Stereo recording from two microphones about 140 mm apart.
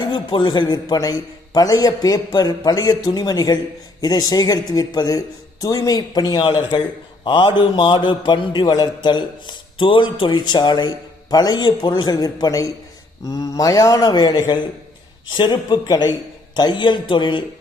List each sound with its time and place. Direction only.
0.1 s a man's voice: 35° left (ahead or behind)